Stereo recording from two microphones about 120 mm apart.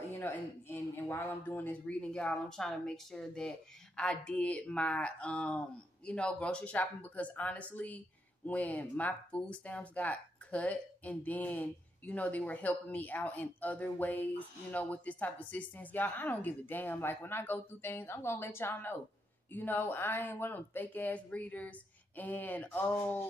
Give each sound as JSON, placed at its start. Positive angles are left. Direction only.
{"t": 0.2, "sound": "speech", "side_deg": 20}